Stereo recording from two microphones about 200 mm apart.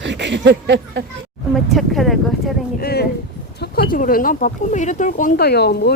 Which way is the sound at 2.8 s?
50° left (ahead or behind).